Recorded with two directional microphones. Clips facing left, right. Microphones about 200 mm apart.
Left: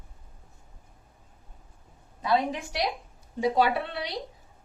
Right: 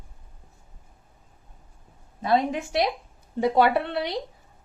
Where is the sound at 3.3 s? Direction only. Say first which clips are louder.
Right 4 dB; 60° right (ahead or behind).